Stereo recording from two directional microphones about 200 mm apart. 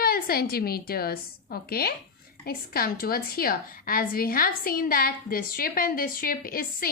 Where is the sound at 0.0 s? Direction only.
50° left (ahead or behind).